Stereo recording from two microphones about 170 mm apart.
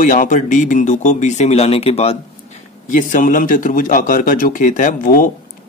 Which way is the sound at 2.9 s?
45° left (ahead or behind).